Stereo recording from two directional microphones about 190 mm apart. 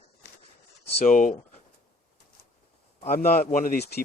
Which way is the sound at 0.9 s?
40° left (ahead or behind).